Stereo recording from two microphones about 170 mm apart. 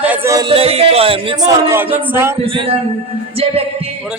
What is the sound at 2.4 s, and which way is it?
Speech, 35° right (ahead or behind).